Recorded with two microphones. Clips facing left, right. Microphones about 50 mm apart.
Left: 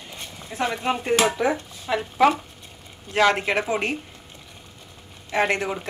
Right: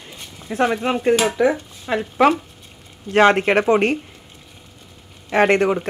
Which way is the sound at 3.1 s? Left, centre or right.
Right.